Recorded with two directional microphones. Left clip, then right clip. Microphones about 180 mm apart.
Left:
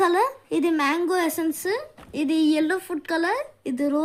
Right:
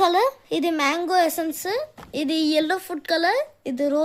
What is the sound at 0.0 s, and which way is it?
A woman's voice, 30° right (ahead or behind).